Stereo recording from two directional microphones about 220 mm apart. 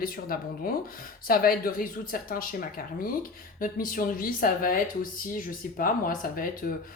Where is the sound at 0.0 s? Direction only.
40° left (ahead or behind).